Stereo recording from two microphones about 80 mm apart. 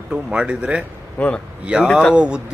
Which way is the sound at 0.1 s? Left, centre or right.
Centre.